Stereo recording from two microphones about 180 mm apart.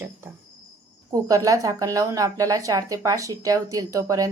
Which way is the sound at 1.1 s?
20° right (ahead or behind).